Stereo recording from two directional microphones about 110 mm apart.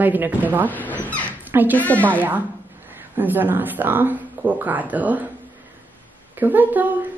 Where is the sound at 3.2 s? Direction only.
15° right (ahead or behind).